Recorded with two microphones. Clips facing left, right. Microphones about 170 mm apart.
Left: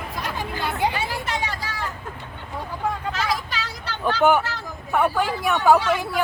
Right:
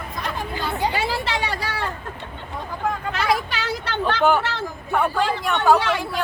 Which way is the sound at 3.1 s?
65° right (ahead or behind).